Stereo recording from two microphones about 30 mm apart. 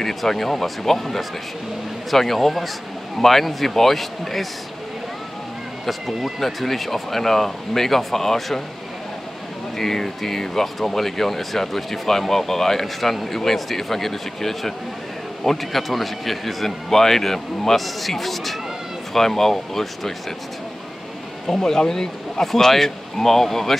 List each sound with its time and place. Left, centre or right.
0.0 s a man's voice: centre
5.9 s speech: centre
6.4 s speech: centre
9.8 s a man's voice: centre
21.5 s speech: centre